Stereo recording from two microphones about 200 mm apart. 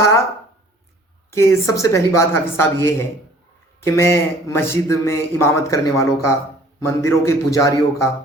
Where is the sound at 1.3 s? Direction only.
15° left (ahead or behind).